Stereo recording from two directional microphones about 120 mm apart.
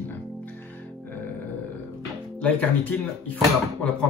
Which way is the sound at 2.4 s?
10° left (ahead or behind).